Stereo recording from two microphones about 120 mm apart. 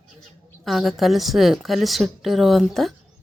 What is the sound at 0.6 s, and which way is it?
A woman's voice, centre (ahead or behind).